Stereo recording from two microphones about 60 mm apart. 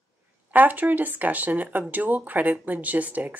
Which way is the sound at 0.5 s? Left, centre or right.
Right.